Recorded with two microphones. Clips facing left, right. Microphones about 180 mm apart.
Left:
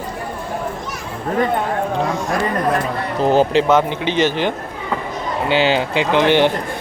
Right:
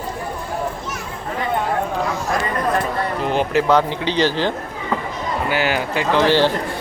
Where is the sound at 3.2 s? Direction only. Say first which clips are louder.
Left 6 dB; 35° left (ahead or behind).